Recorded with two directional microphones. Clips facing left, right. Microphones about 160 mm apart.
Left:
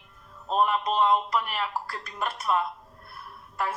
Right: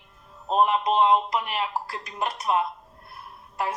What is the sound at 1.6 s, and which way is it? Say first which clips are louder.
Speech: right 2 dB; 15° right (ahead or behind).